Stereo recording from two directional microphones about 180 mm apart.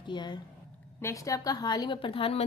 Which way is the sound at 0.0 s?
25° left (ahead or behind).